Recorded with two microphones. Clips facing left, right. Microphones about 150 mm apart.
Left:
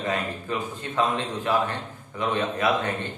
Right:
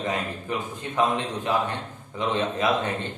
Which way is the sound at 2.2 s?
20° right (ahead or behind).